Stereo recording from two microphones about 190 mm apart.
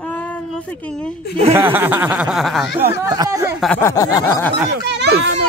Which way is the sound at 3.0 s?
20° right (ahead or behind).